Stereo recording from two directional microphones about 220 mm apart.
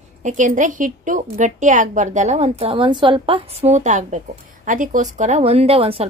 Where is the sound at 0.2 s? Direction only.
35° right (ahead or behind).